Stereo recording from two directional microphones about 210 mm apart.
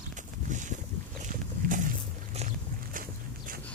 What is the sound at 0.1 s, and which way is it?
Boat, 35° right (ahead or behind).